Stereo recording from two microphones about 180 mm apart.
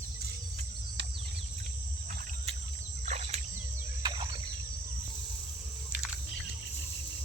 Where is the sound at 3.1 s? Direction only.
40° right (ahead or behind).